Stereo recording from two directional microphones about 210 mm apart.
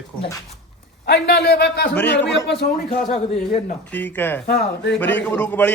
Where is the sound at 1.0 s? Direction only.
55° left (ahead or behind).